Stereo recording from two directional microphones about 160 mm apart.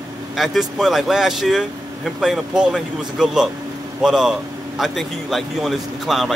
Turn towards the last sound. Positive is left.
turn(degrees=0)  # may be behind; listen again after turning